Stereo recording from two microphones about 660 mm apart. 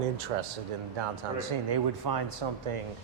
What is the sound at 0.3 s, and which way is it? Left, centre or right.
Speech, right.